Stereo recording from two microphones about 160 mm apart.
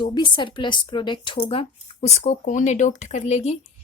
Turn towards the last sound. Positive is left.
turn(degrees=45)  # may be behind; listen again after turning